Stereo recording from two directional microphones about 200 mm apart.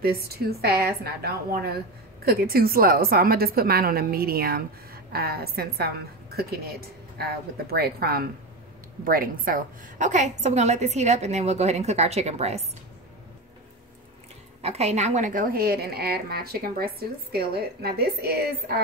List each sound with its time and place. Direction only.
0.0 s a woman's voice: 50° right (ahead or behind); by 12.6 s 30° right (ahead or behind)
14.6 s a woman's voice: 30° right (ahead or behind); by 18.8 s 50° right (ahead or behind)